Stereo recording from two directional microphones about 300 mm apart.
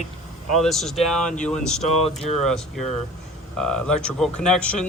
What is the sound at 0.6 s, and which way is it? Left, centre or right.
A man's voice, centre.